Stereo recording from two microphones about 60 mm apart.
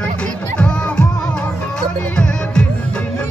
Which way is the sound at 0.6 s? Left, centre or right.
Centre.